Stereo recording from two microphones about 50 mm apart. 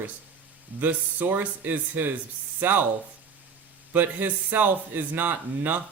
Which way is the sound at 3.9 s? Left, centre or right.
Right.